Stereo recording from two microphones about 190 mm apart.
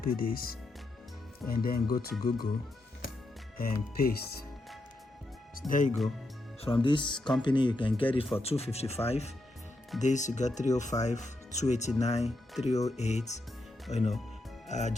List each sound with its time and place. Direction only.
0.0 s speech: 50° left (ahead or behind)
3.6 s speech: 50° left (ahead or behind)
5.5 s speech: 45° left (ahead or behind)
6.8 s speech: 25° left (ahead or behind)